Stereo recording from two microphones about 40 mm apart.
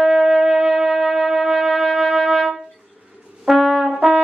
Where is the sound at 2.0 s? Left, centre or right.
Centre.